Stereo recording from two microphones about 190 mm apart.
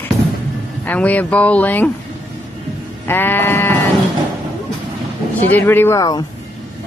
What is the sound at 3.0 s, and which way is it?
Speech, 10° left (ahead or behind).